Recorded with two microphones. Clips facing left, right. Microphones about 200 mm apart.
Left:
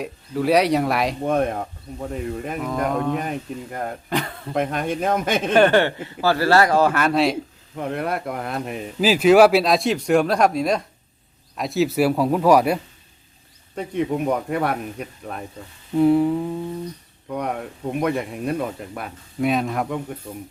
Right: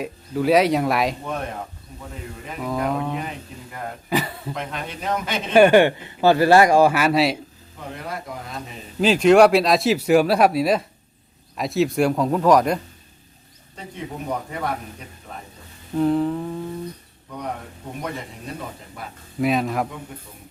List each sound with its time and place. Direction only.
0.0 s speech: centre (ahead or behind)
1.2 s speech: 50° left (ahead or behind)
2.6 s speech: centre (ahead or behind)
3.2 s speech: 50° left (ahead or behind)
4.1 s speech: 5° right (ahead or behind)
4.5 s speech: 50° left (ahead or behind)
5.5 s speech: 10° right (ahead or behind)
7.8 s speech: 60° left (ahead or behind)
9.0 s speech: 5° left (ahead or behind)
13.7 s speech: 60° left (ahead or behind)
16.0 s speech: 10° left (ahead or behind)
17.2 s speech: 55° left (ahead or behind)
19.0 s speech: 60° left (ahead or behind)
19.4 s speech: centre (ahead or behind)